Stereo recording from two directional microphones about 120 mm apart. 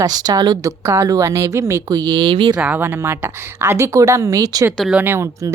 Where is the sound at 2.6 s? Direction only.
15° right (ahead or behind).